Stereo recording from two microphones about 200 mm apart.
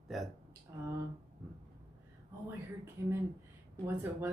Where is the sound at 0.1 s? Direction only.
Centre (ahead or behind).